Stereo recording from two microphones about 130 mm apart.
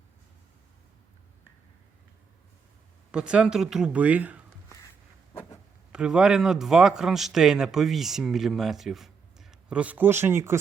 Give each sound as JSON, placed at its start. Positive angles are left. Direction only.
{"t": 3.1, "sound": "speech", "side_deg": -5}
{"t": 5.9, "sound": "speech", "side_deg": -5}